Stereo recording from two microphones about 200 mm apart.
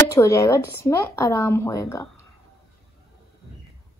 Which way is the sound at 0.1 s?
15° left (ahead or behind).